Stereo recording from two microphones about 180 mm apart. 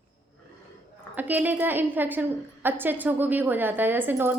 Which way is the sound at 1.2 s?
10° right (ahead or behind).